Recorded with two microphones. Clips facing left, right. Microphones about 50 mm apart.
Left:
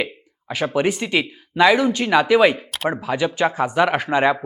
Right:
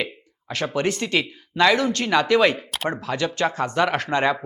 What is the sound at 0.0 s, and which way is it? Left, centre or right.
Speech, centre.